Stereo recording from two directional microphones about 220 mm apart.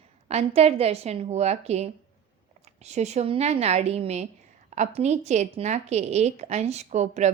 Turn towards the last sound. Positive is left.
turn(degrees=-30)  # may be behind; listen again after turning